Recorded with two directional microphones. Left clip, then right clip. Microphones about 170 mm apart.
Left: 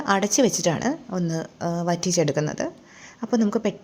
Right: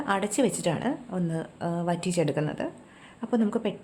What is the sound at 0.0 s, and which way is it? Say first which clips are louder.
A woman's voice: left 5 dB; 30° left (ahead or behind).